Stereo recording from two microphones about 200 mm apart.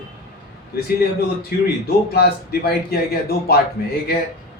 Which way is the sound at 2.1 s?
50° left (ahead or behind).